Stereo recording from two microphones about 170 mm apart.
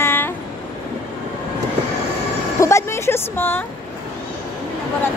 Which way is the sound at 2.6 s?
15° left (ahead or behind).